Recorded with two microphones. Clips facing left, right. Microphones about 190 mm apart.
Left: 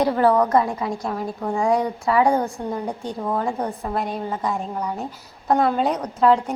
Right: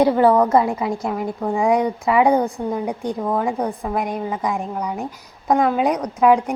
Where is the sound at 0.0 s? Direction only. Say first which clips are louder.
Right 3 dB; 20° right (ahead or behind).